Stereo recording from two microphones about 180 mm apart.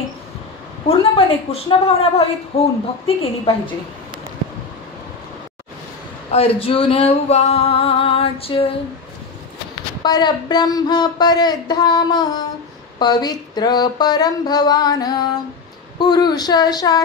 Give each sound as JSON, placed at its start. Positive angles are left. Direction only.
{"t": 0.8, "sound": "music", "side_deg": 30}
{"t": 3.2, "sound": "speech", "side_deg": 30}
{"t": 6.3, "sound": "music", "side_deg": 30}
{"t": 10.0, "sound": "speech", "side_deg": 20}